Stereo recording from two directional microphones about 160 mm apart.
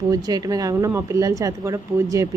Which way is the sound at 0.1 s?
25° right (ahead or behind).